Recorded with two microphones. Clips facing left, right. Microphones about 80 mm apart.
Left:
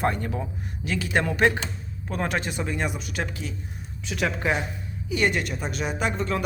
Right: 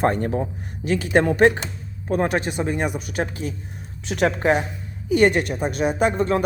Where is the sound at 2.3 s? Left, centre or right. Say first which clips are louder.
Right 5 dB; right.